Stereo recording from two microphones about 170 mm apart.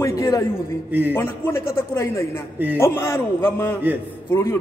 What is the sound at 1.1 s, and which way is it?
A man's voice, 15° left (ahead or behind).